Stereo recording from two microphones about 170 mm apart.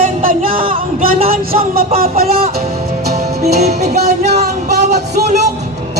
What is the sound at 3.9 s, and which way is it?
Speech, 70° right (ahead or behind).